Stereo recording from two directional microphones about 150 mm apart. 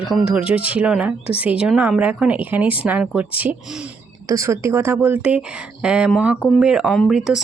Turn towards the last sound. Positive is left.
turn(degrees=-5)  # may be behind; listen again after turning